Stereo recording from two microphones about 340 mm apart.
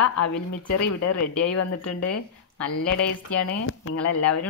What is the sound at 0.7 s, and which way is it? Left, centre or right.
Speech, left.